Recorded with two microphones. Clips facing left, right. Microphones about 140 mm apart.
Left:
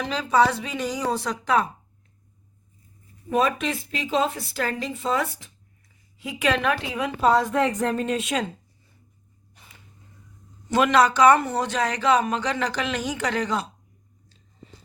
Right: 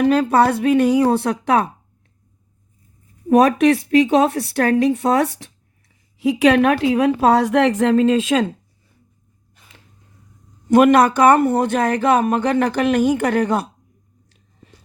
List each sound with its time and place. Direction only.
0.0 s a woman's voice: 55° right (ahead or behind)
3.2 s a woman's voice: 70° right (ahead or behind)
6.1 s a woman's voice: 85° right
10.7 s a man's voice: 55° right (ahead or behind)